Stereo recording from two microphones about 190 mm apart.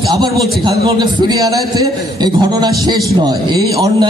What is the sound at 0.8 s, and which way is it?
A man's voice, 25° right (ahead or behind).